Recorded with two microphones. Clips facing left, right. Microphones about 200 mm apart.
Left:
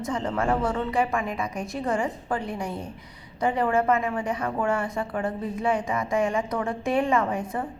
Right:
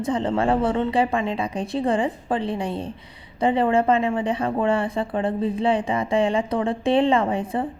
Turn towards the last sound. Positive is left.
turn(degrees=-30)  # may be behind; listen again after turning